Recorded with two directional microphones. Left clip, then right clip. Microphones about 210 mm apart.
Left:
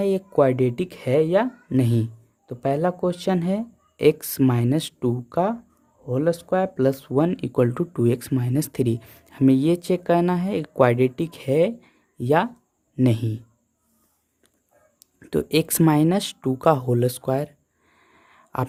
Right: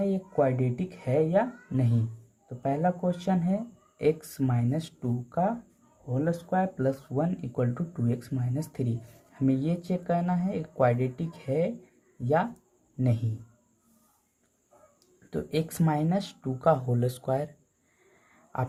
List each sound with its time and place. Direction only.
0.0 s speech: 45° left (ahead or behind)
14.9 s speech: 45° left (ahead or behind)
18.0 s a sound: 40° left (ahead or behind)